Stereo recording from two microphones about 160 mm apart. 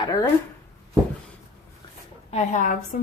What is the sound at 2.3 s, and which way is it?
Speech, 45° left (ahead or behind).